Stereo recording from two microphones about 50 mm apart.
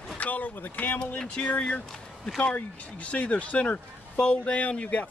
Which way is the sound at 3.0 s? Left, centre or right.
Left.